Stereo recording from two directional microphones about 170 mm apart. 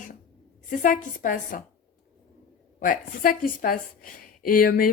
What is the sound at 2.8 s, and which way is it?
A woman's voice, 55° left (ahead or behind).